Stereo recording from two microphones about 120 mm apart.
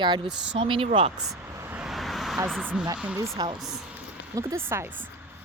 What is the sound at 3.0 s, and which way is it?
Speech, 10° right (ahead or behind).